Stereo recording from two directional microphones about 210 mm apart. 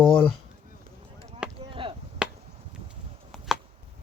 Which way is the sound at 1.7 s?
25° right (ahead or behind).